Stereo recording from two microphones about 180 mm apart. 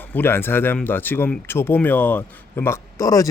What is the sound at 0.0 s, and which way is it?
Speech, 10° left (ahead or behind).